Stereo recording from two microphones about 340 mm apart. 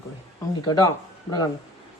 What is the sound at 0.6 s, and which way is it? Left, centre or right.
Speech, centre.